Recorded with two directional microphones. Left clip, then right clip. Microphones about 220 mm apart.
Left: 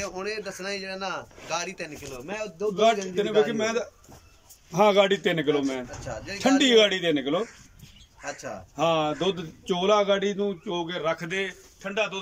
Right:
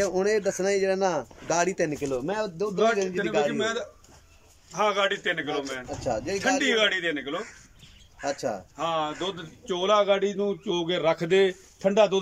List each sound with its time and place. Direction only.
0.0 s speech: 30° right (ahead or behind)
3.4 s speech: 10° left (ahead or behind)
4.7 s a man's voice: 20° left (ahead or behind)
6.0 s speech: 25° right (ahead or behind)
6.6 s speech: 15° left (ahead or behind)
8.2 s speech: 20° right (ahead or behind)
8.7 s a man's voice: 10° left (ahead or behind); by 12.2 s 25° right (ahead or behind)